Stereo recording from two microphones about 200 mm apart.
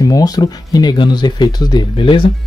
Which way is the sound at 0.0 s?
20° left (ahead or behind).